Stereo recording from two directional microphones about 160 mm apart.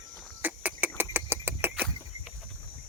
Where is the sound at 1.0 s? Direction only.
15° right (ahead or behind).